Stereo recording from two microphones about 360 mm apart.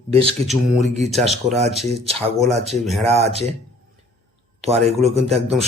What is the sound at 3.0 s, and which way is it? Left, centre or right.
Speech, centre.